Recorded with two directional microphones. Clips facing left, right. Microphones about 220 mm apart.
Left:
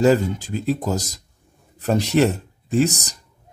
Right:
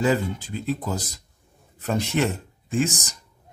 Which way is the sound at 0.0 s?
40° left (ahead or behind).